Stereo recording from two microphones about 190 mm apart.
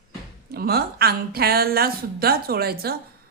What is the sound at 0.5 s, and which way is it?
Speech, 55° right (ahead or behind).